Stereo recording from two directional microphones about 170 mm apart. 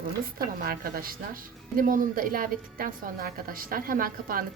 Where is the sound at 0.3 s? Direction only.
60° right (ahead or behind).